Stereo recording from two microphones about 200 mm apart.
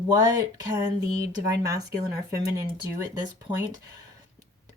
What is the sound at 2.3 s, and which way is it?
Speech, 15° right (ahead or behind).